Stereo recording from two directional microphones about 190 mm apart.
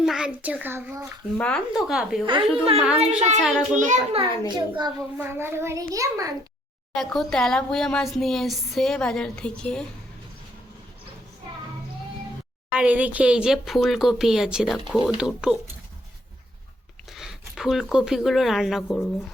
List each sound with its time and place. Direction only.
0.0 s a child's voice: 5° right (ahead or behind)
1.4 s speech: 5° left (ahead or behind)
2.2 s a woman's voice: 30° right (ahead or behind)
5.1 s a child's voice: 10° right (ahead or behind)
6.9 s speech: centre (ahead or behind)
12.7 s speech: 5° right (ahead or behind)
17.1 s speech: centre (ahead or behind)